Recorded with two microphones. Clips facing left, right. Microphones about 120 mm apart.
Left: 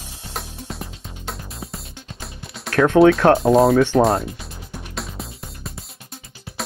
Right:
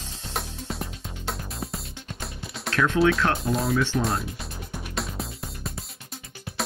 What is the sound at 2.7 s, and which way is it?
Speech, 55° left (ahead or behind).